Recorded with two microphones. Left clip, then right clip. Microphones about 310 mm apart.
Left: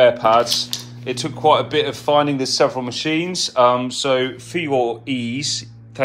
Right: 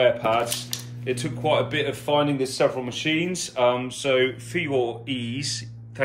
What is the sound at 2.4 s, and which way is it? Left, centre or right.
Speech, left.